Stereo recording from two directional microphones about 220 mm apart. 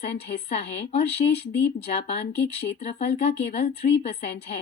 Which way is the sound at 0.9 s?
30° left (ahead or behind).